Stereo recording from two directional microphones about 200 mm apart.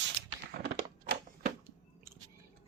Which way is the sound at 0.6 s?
50° right (ahead or behind).